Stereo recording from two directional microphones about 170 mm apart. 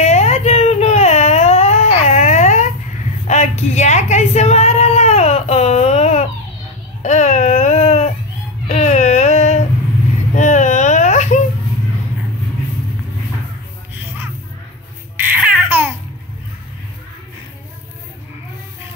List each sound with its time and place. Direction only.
0.0 s whimper: 40° left (ahead or behind)
3.3 s a sound: 40° left (ahead or behind)
7.0 s babbling: 45° left (ahead or behind)
8.6 s a sound: 45° left (ahead or behind)
10.3 s baby cry: 45° left (ahead or behind)
13.9 s music: 10° right (ahead or behind)
15.1 s baby cry: 10° right (ahead or behind)